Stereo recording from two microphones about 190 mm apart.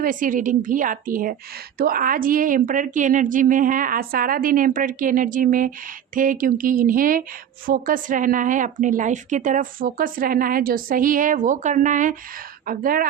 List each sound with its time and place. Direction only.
0.0 s a woman's voice: 45° right (ahead or behind)